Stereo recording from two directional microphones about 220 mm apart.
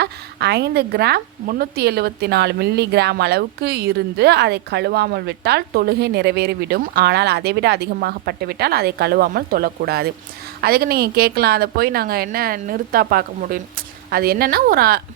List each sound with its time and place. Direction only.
0.0 s a woman's voice: 45° right (ahead or behind)